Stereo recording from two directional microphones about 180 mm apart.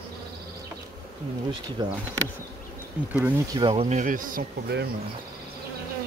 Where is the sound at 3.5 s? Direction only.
30° right (ahead or behind); by 4.9 s 60° right (ahead or behind).